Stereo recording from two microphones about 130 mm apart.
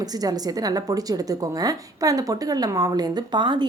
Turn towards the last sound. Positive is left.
turn(degrees=-35)  # may be behind; listen again after turning